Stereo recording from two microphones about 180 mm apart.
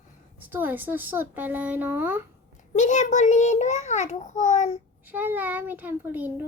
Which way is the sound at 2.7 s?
45° left (ahead or behind).